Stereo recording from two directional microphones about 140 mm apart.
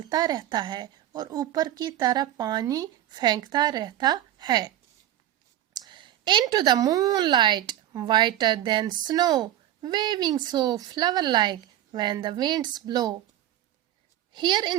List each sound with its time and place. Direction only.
0.1 s a woman's voice: 30° right (ahead or behind)
5.7 s a woman's voice: 30° right (ahead or behind)
14.3 s a woman's voice: 30° right (ahead or behind)